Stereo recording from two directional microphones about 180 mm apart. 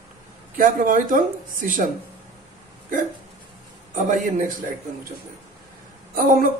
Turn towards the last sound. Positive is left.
turn(degrees=-50)  # may be behind; listen again after turning